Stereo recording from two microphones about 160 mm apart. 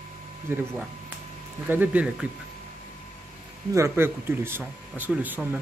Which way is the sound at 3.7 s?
15° right (ahead or behind).